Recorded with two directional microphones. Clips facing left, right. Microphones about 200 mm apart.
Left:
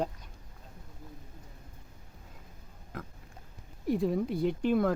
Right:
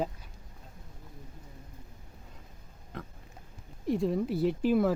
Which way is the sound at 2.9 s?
Centre (ahead or behind).